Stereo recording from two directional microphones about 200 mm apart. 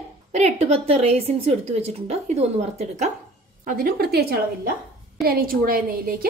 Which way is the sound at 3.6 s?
45° right (ahead or behind).